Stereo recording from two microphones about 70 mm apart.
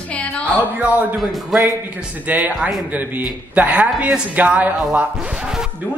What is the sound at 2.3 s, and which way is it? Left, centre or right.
Speech, right.